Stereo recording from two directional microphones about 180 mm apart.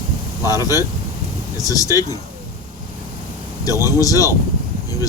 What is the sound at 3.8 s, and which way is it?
Speech, 15° right (ahead or behind).